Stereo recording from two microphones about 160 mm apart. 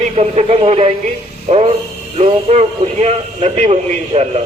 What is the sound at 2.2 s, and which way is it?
A man's voice, 40° right (ahead or behind).